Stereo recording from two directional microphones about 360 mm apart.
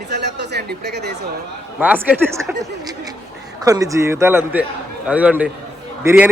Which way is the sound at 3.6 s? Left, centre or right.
Centre.